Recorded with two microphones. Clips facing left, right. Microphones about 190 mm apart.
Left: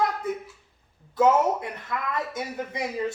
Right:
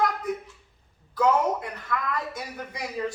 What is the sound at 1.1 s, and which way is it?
A man's voice, 25° left (ahead or behind).